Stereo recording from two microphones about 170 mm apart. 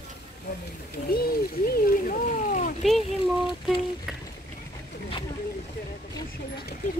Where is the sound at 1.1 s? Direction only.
65° left (ahead or behind).